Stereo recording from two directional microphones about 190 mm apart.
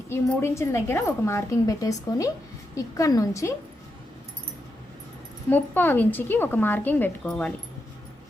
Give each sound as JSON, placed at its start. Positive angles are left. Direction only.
{"t": 0.1, "sound": "a woman's voice", "side_deg": 15}
{"t": 5.5, "sound": "a woman's voice", "side_deg": 10}